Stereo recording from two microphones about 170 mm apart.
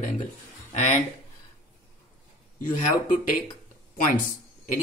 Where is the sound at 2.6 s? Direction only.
50° left (ahead or behind).